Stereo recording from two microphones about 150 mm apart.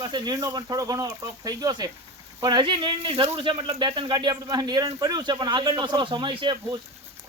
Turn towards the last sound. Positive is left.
turn(degrees=-30)  # may be behind; listen again after turning